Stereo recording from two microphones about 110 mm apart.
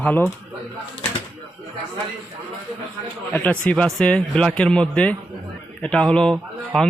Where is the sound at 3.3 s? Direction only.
10° left (ahead or behind).